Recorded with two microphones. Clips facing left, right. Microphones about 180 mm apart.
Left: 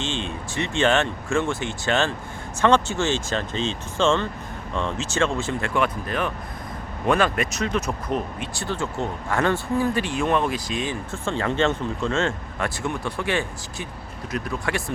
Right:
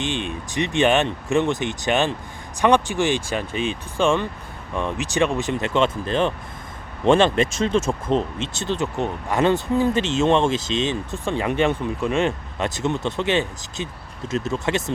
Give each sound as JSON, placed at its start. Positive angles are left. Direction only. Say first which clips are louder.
{"t": 0.0, "sound": "speech", "louder": "right 2 dB", "side_deg": -15}